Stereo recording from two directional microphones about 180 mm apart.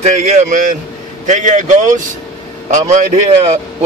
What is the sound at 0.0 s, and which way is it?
A man's voice, 40° right (ahead or behind).